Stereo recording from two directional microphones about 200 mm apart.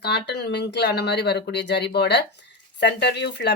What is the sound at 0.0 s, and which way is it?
Speech, 55° left (ahead or behind).